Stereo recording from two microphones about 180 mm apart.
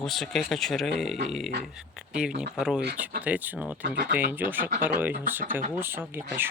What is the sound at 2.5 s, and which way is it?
Speech, 5° right (ahead or behind).